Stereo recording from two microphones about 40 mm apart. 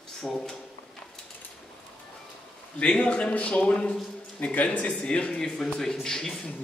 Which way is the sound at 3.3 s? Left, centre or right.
Left.